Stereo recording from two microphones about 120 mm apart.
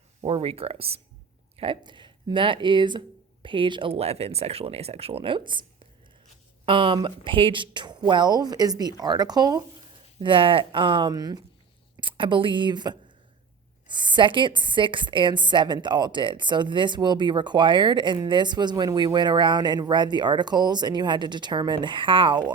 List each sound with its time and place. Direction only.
0.2 s a woman's voice: 50° right (ahead or behind)
6.7 s a woman's voice: 45° right (ahead or behind)
10.2 s a woman's voice: 45° right (ahead or behind)
11.1 s a woman's voice: 35° right (ahead or behind)
11.9 s a woman's voice: 45° right (ahead or behind)